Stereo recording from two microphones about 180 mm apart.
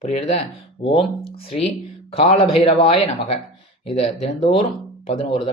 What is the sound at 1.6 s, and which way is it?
Speech, 35° left (ahead or behind).